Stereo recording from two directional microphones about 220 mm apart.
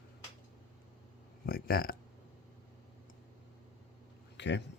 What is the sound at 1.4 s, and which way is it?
Speech, 45° left (ahead or behind).